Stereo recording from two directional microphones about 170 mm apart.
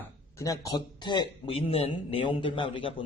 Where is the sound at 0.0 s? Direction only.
20° left (ahead or behind).